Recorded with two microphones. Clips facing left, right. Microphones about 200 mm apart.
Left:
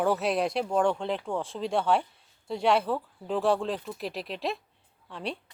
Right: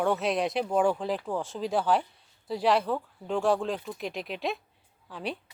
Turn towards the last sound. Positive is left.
turn(degrees=0)  # may be behind; listen again after turning